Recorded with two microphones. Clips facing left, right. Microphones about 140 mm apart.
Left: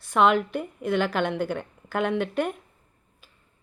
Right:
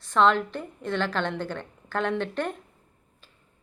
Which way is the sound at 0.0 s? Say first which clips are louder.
Left 1 dB; 10° left (ahead or behind).